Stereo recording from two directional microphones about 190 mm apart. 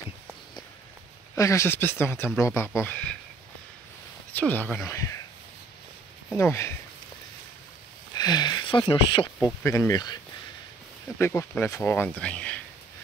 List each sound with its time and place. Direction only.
1.3 s speech: 15° left (ahead or behind)
4.3 s speech: 10° left (ahead or behind)
6.3 s speech: 15° left (ahead or behind)
8.2 s speech: 20° left (ahead or behind)
9.6 s speech: 15° left (ahead or behind)